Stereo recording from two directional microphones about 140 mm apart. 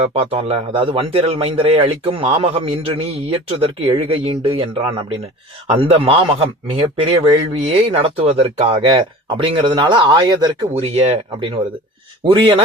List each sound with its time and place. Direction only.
0.1 s speech: 45° right (ahead or behind); by 10.7 s 30° right (ahead or behind)
10.8 s speech: 50° right (ahead or behind)